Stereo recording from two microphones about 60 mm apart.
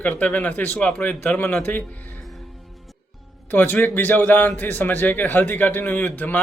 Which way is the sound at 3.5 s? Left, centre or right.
Left.